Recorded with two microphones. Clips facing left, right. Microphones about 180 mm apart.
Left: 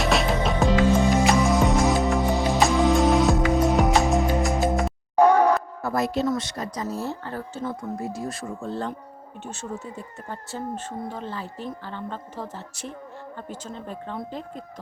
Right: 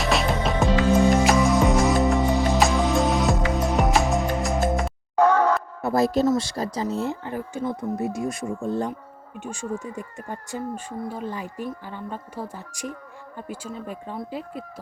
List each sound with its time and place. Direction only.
0.0 s music: centre (ahead or behind)
5.1 s a sound: 15° left (ahead or behind)
5.8 s speech: 30° right (ahead or behind)
6.8 s speech: 15° right (ahead or behind)